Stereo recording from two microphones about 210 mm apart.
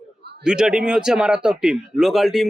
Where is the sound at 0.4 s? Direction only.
5° right (ahead or behind).